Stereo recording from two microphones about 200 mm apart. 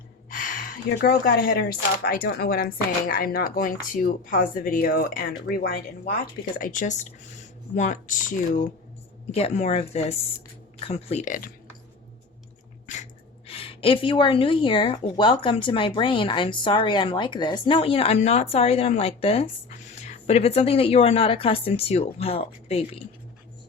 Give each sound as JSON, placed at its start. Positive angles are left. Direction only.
{"t": 0.3, "sound": "gasp", "side_deg": 45}
{"t": 2.0, "sound": "speech", "side_deg": 50}
{"t": 6.6, "sound": "speech", "side_deg": 40}
{"t": 9.3, "sound": "speech", "side_deg": 30}
{"t": 13.5, "sound": "a woman's voice", "side_deg": 30}